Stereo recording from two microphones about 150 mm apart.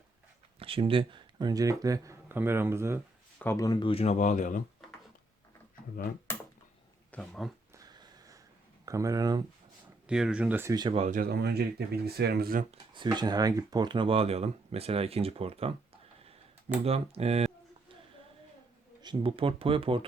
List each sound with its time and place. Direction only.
0.6 s speech: 35° right (ahead or behind); by 3.0 s 15° right (ahead or behind)
3.3 s speech: 15° left (ahead or behind); by 4.6 s 55° left (ahead or behind)
7.1 s speech: 5° left (ahead or behind)
7.7 s a sound: 25° right (ahead or behind)
8.9 s speech: 20° right (ahead or behind)
10.1 s speech: 5° right (ahead or behind)
10.7 s speech: 30° right (ahead or behind)
10.9 s speech: 50° right (ahead or behind)
11.2 s speech: 90° right
12.7 s speech: 30° right (ahead or behind)
16.8 s a sound: 45° right (ahead or behind)
19.0 s speech: 35° right (ahead or behind)